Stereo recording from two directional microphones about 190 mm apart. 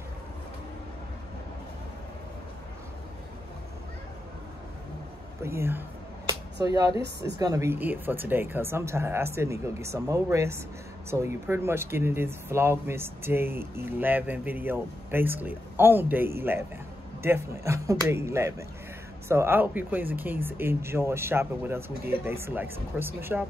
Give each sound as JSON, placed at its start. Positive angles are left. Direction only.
{"t": 5.4, "sound": "speech", "side_deg": -15}